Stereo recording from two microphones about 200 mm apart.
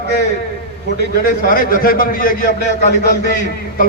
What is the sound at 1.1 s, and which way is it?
A man's voice, 45° left (ahead or behind).